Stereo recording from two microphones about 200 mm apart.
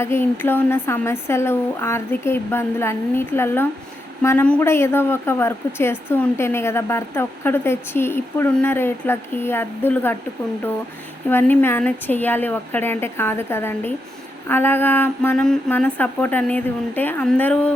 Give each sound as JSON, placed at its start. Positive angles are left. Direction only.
{"t": 0.0, "sound": "a woman's voice", "side_deg": 10}
{"t": 11.3, "sound": "a woman's voice", "side_deg": 10}